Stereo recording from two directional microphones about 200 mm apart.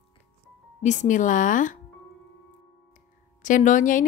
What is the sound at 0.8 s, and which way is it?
Speech, 35° left (ahead or behind).